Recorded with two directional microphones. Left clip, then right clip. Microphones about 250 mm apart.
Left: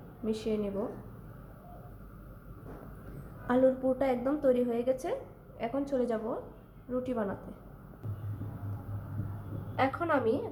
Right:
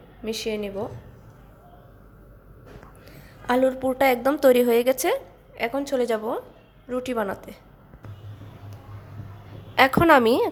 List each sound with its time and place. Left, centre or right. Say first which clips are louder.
0.3 s a woman's voice: right 5 dB; right
3.4 s a woman's voice: right 5 dB; right
9.7 s a woman's voice: right 13 dB; right